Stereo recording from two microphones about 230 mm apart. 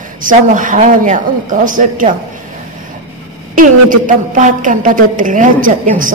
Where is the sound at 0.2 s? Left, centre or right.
Right.